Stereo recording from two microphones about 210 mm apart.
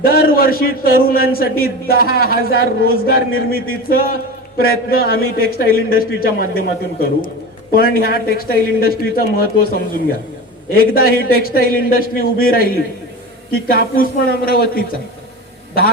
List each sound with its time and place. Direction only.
0.0 s a man's voice: 45° left (ahead or behind)
10.8 s a man's voice: 45° left (ahead or behind)